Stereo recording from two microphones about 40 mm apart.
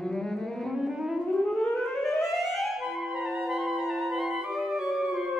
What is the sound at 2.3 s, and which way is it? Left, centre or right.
Clarinet, centre.